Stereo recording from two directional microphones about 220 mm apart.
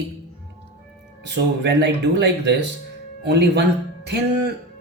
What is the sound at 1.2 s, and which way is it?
Speech, 50° right (ahead or behind).